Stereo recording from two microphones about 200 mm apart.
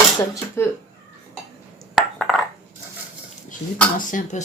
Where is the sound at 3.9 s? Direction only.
40° left (ahead or behind).